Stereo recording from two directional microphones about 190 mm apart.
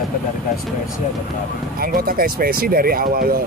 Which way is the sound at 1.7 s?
50° right (ahead or behind).